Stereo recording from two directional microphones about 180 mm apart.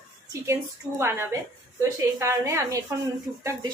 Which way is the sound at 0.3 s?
15° right (ahead or behind).